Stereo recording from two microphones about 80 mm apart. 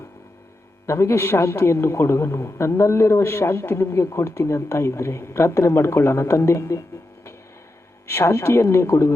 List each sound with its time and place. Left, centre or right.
0.9 s a man's voice: left
8.0 s a man's voice: left